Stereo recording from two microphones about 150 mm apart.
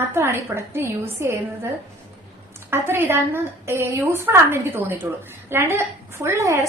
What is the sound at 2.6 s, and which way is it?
A woman's voice, 15° right (ahead or behind).